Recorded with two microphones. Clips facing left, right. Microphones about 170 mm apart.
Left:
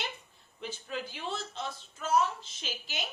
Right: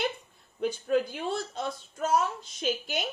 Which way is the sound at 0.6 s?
50° right (ahead or behind).